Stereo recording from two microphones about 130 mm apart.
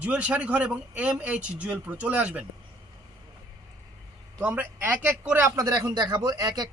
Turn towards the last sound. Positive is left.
turn(degrees=-30)  # may be behind; listen again after turning